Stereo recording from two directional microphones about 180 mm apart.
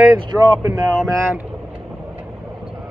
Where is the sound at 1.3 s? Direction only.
10° right (ahead or behind).